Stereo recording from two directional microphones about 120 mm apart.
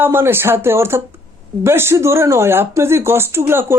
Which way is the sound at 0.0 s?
20° right (ahead or behind).